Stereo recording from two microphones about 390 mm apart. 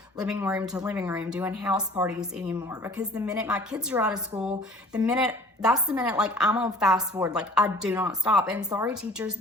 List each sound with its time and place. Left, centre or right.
0.2 s speech: centre